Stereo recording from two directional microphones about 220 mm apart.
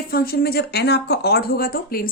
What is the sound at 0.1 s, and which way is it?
Speech, 45° left (ahead or behind).